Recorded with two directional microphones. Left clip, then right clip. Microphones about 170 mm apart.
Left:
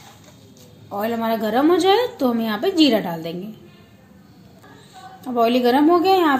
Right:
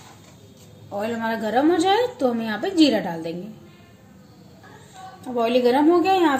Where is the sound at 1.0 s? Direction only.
55° left (ahead or behind).